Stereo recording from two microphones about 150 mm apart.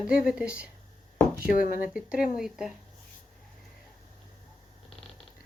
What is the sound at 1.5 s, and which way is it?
Speech, 70° left (ahead or behind).